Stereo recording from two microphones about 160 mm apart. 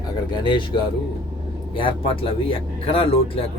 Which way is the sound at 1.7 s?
35° left (ahead or behind).